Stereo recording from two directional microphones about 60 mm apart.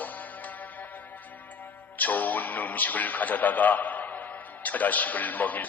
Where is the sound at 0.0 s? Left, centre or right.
Left.